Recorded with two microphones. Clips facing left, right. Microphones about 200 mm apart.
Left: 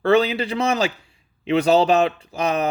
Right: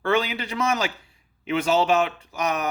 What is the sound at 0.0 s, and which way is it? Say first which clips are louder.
Speech: left 6 dB; 35° left (ahead or behind).